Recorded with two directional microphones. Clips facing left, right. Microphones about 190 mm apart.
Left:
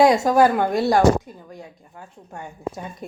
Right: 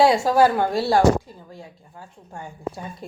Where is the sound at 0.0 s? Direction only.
20° left (ahead or behind).